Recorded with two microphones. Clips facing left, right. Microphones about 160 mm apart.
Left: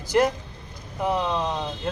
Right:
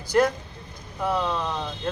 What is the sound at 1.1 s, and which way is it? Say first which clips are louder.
Speech: left 1 dB; 15° left (ahead or behind).